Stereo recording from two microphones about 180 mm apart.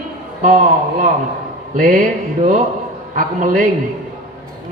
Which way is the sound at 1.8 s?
50° right (ahead or behind).